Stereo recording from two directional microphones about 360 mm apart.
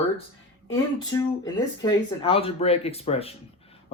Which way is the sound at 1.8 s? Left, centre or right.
Centre.